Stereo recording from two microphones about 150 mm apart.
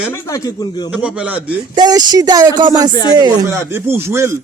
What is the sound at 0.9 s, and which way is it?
Speech, 5° right (ahead or behind).